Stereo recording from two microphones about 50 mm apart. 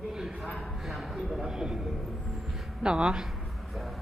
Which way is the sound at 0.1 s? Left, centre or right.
Centre.